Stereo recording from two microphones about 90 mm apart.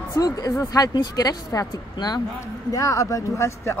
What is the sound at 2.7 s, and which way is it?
Speech, 35° left (ahead or behind).